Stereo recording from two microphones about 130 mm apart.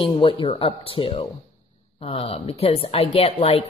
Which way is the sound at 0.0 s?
40° left (ahead or behind).